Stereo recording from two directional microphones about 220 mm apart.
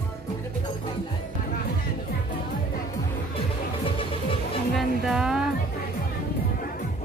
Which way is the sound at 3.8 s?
25° left (ahead or behind).